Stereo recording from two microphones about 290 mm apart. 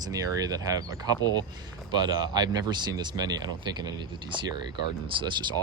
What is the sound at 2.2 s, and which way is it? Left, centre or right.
Speech, centre.